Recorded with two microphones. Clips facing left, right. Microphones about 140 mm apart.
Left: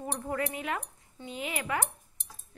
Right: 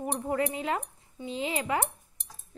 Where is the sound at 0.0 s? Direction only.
25° right (ahead or behind).